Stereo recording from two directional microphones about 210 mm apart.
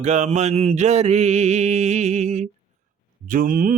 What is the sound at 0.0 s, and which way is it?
Mantra, 30° right (ahead or behind).